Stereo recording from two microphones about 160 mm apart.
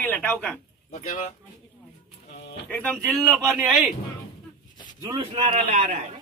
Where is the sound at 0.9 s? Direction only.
45° left (ahead or behind).